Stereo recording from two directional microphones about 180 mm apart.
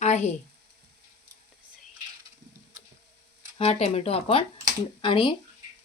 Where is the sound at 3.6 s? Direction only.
35° left (ahead or behind).